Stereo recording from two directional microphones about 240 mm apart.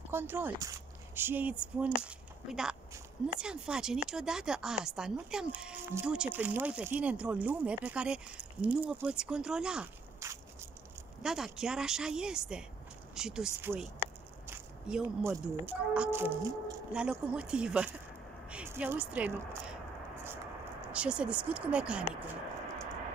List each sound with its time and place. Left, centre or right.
0.1 s speech: centre
14.5 s biting: centre
15.3 s speech: centre
20.9 s speech: centre